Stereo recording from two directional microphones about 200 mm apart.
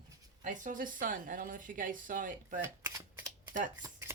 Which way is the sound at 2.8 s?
10° right (ahead or behind).